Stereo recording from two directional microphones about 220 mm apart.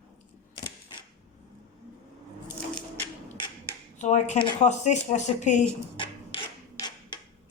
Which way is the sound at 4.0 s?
30° left (ahead or behind).